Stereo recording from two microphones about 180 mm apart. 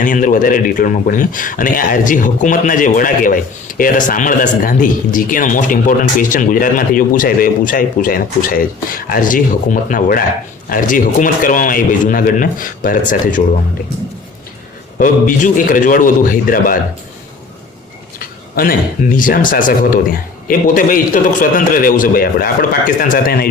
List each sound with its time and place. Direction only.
0.0 s speech: 45° left (ahead or behind)
14.9 s speech: 45° left (ahead or behind)
18.5 s speech: 50° left (ahead or behind)